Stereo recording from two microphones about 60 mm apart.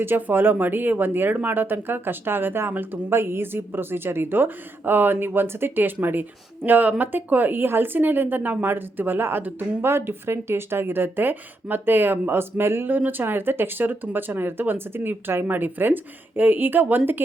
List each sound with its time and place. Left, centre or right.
0.0 s speech: right